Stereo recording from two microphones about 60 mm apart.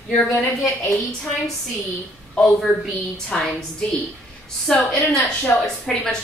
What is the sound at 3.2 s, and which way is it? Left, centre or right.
Speech, centre.